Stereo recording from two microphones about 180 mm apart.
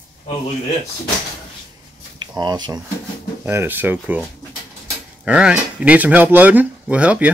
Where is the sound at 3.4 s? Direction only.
10° right (ahead or behind).